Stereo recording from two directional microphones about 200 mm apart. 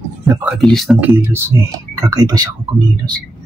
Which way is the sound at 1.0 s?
10° right (ahead or behind).